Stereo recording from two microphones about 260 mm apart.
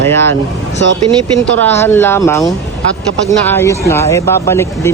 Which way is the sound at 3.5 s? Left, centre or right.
Centre.